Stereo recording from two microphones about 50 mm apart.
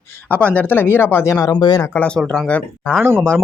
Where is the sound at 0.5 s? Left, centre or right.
Left.